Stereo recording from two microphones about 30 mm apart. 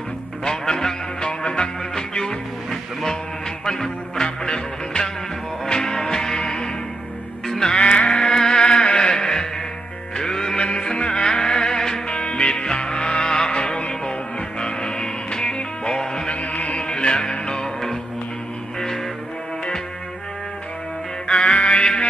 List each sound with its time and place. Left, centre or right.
0.4 s music: centre
1.2 s music: left
2.7 s music: centre
7.7 s music: left
8.4 s music: left
11.2 s music: left
16.3 s music: left
16.8 s music: left
21.3 s music: left